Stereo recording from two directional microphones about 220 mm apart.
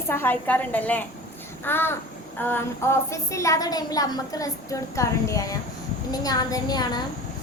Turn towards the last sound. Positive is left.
turn(degrees=15)  # may be behind; listen again after turning